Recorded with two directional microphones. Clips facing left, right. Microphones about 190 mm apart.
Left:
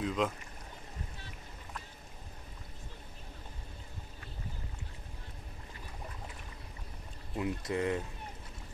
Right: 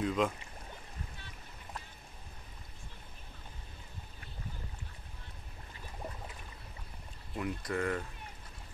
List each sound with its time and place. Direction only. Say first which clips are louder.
0.0 s speech: right 1 dB; centre (ahead or behind)
7.3 s speech: left 2 dB; 20° left (ahead or behind)